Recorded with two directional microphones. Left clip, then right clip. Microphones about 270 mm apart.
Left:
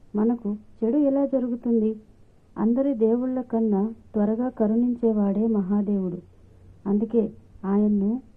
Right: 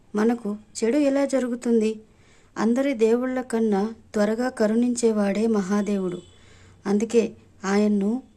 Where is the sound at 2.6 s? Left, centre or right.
Centre.